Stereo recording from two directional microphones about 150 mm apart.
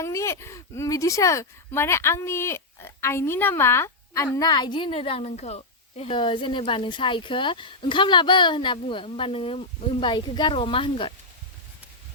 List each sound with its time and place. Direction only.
0.0 s speech: 20° left (ahead or behind)
4.4 s a woman's voice: 30° left (ahead or behind)